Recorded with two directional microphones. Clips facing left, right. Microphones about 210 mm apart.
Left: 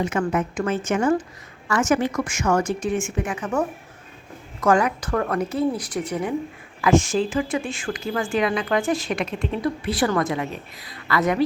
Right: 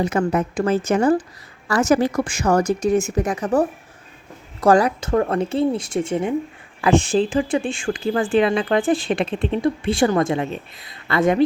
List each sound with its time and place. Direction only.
0.0 s a woman's voice: 35° right (ahead or behind)